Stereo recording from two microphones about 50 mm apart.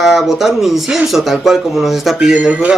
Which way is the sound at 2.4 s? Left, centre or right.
Right.